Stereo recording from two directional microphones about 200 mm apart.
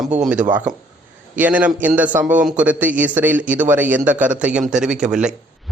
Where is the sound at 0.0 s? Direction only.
5° right (ahead or behind).